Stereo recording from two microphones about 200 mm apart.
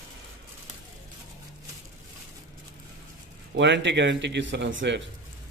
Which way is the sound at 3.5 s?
65° right (ahead or behind).